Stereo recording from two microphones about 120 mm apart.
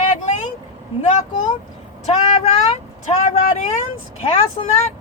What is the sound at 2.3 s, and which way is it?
Speech, 65° left (ahead or behind).